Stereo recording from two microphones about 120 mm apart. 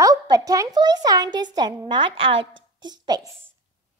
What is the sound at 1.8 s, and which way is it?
A woman's voice, 45° right (ahead or behind).